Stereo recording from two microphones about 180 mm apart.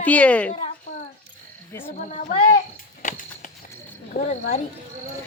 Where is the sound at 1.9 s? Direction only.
40° left (ahead or behind).